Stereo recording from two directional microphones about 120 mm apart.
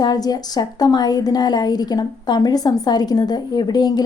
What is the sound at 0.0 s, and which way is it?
A woman's voice, 35° left (ahead or behind).